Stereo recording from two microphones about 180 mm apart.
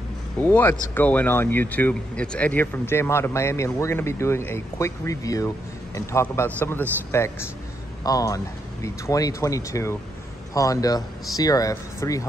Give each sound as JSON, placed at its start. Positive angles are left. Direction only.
{"t": 0.4, "sound": "speech", "side_deg": 10}